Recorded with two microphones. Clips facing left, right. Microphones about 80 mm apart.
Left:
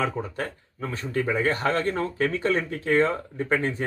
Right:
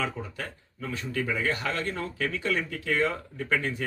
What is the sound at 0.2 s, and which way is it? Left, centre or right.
Speech, left.